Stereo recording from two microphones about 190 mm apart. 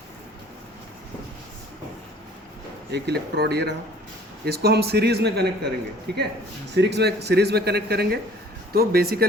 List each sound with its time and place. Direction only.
2.9 s speech: 60° right (ahead or behind)